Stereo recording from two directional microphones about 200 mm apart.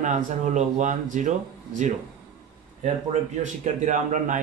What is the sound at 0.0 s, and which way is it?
Speech, 40° right (ahead or behind).